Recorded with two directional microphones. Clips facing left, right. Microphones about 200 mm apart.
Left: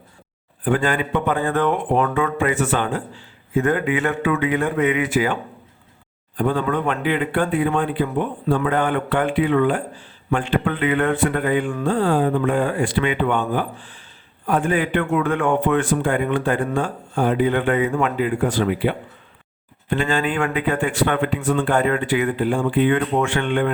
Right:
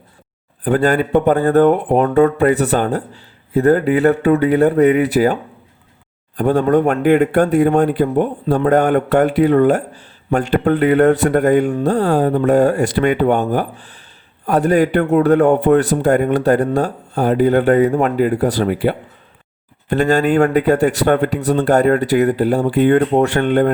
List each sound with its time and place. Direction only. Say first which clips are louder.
0.6 s speech: right 5 dB; 40° right (ahead or behind)